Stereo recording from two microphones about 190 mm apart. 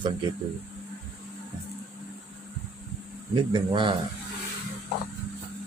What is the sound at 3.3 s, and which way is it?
Speech, 25° right (ahead or behind).